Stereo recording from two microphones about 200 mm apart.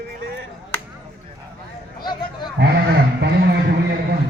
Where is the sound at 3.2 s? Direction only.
55° right (ahead or behind).